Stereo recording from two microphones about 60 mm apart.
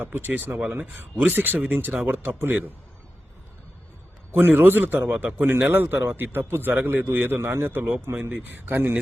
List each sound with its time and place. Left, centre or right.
0.0 s a man's voice: right
4.3 s a man's voice: right